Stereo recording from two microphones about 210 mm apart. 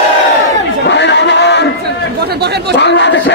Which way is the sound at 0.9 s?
55° left (ahead or behind).